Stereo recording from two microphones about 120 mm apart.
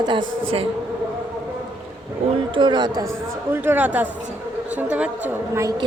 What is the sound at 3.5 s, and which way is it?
Speech, 15° right (ahead or behind).